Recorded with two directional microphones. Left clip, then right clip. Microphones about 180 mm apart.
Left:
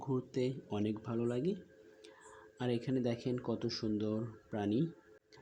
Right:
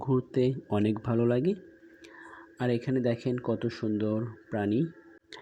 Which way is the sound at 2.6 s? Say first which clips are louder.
Right 7 dB; 15° right (ahead or behind).